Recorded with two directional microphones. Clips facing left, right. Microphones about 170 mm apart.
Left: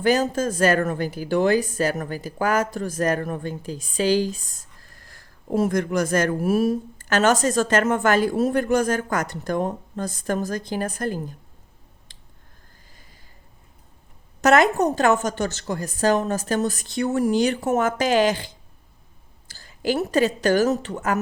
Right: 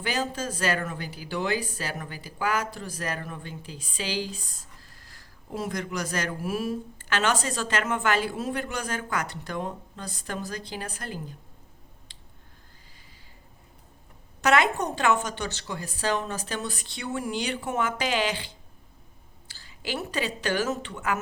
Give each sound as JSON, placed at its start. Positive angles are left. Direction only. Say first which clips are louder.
{"t": 0.0, "sound": "speech", "louder": "left 9 dB", "side_deg": 45}
{"t": 12.1, "sound": "a sound", "louder": "even", "side_deg": 45}
{"t": 14.4, "sound": "a woman's voice", "louder": "left 6 dB", "side_deg": 45}